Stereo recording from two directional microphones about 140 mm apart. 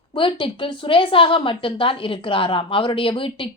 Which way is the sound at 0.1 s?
35° left (ahead or behind).